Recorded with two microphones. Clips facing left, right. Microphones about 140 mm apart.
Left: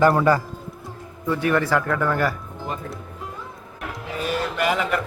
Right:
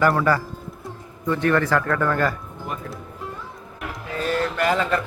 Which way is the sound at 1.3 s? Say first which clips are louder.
Right 1 dB; 10° left (ahead or behind).